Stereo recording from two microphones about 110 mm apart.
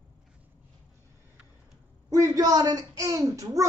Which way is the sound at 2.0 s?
30° right (ahead or behind).